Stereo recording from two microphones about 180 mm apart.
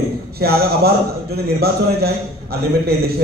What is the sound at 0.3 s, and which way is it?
A man's voice, 60° right (ahead or behind).